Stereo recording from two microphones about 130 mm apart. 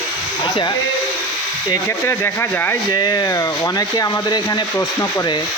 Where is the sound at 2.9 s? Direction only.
30° left (ahead or behind).